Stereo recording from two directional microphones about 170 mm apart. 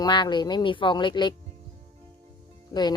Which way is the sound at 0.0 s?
25° left (ahead or behind).